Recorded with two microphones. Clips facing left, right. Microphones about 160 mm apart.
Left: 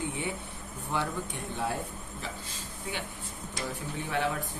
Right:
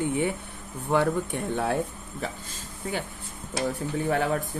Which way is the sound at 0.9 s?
55° right (ahead or behind).